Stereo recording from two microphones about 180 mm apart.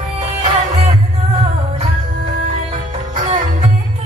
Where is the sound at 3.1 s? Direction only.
40° right (ahead or behind).